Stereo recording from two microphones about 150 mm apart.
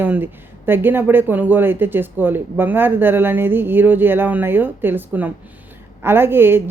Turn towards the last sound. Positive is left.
turn(degrees=-15)  # may be behind; listen again after turning